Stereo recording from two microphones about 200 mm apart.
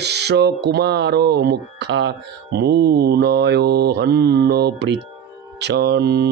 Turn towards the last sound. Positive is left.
turn(degrees=-55)  # may be behind; listen again after turning